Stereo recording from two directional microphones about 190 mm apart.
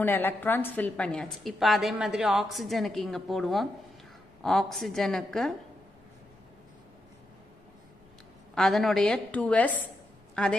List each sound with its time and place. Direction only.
0.0 s a woman's voice: 10° left (ahead or behind)
8.5 s a woman's voice: centre (ahead or behind)